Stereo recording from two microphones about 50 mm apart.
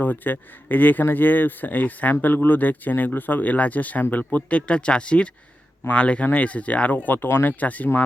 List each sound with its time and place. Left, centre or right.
0.0 s speech: left